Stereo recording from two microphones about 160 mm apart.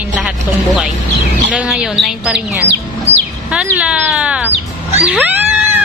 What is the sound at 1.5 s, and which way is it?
Speech, 5° right (ahead or behind).